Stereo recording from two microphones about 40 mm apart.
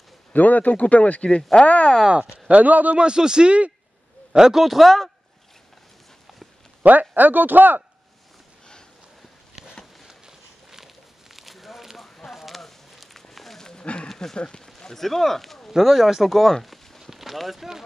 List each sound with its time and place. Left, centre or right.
0.3 s speech: left
2.0 s speech: right
2.6 s a man's voice: right
3.0 s speech: right
4.3 s a man's voice: centre
4.6 s a man's voice: centre
6.8 s speech: right
10.0 s a sound: centre
13.6 s a sound: centre
14.8 s a man's voice: centre
16.3 s a man's voice: centre
16.6 s a sound: centre